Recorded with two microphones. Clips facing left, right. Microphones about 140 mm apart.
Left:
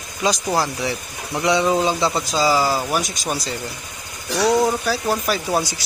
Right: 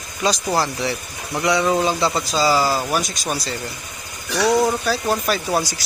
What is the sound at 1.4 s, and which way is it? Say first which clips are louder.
Speech: even; 20° left (ahead or behind).